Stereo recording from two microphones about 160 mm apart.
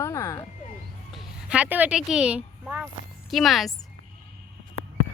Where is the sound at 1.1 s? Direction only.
5° right (ahead or behind).